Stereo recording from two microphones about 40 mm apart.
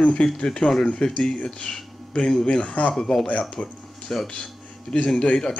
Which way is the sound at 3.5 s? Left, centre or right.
Left.